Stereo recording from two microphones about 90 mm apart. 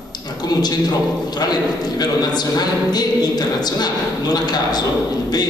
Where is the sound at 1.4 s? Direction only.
45° left (ahead or behind).